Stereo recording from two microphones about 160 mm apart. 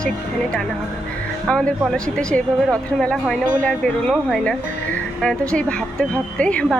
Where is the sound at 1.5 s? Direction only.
5° left (ahead or behind).